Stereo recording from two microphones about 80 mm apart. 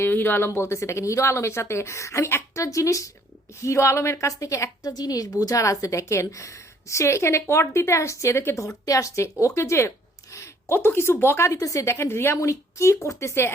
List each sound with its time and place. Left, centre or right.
0.0 s a woman's voice: left
11.5 s a woman's voice: left